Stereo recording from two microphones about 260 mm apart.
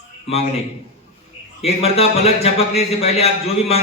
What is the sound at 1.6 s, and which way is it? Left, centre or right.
A man's voice, left.